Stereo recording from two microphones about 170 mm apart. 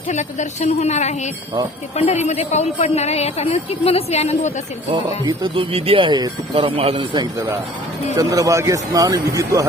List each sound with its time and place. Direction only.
0.1 s a woman's voice: 45° left (ahead or behind)
5.0 s speech: 25° right (ahead or behind)